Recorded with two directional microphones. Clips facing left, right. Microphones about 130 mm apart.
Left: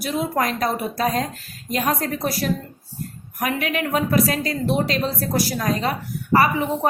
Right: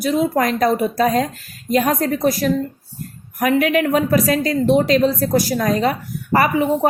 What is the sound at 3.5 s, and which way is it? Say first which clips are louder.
A woman's voice: right 7 dB; 40° right (ahead or behind).